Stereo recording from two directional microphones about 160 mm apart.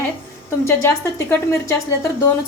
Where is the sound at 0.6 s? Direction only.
15° left (ahead or behind).